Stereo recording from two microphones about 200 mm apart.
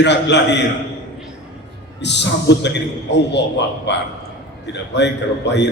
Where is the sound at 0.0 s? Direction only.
60° left (ahead or behind).